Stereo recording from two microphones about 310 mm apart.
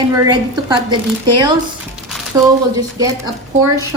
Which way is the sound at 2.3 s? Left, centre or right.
Centre.